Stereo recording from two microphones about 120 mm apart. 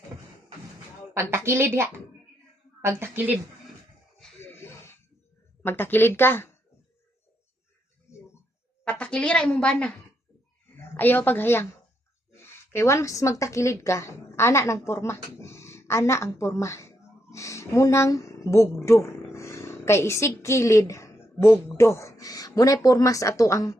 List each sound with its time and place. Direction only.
1.1 s a woman's voice: 20° right (ahead or behind)
3.0 s a woman's voice: 15° right (ahead or behind)
4.5 s music: 20° left (ahead or behind)
5.6 s a woman's voice: 15° left (ahead or behind)
8.8 s a woman's voice: 10° left (ahead or behind); by 23.7 s 25° left (ahead or behind)